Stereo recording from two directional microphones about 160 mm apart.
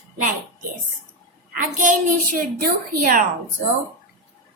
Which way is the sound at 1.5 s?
60° right (ahead or behind).